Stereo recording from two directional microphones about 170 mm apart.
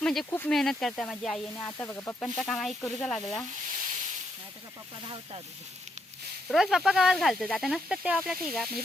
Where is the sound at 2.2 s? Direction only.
Centre (ahead or behind).